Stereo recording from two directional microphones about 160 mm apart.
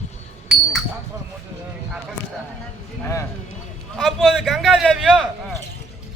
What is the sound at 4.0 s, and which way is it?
A man's voice, centre (ahead or behind).